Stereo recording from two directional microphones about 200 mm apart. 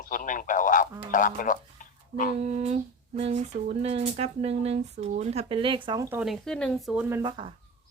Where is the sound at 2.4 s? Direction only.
35° right (ahead or behind); by 7.0 s centre (ahead or behind).